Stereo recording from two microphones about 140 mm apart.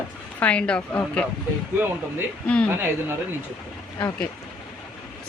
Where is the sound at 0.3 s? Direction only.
10° left (ahead or behind).